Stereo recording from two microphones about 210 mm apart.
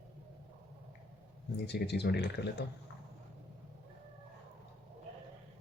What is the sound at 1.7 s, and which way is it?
Speech, 55° left (ahead or behind).